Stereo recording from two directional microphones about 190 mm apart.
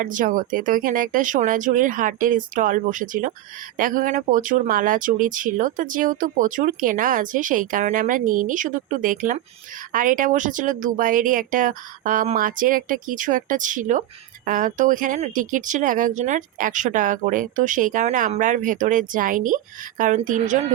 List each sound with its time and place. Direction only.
0.0 s speech: 45° right (ahead or behind)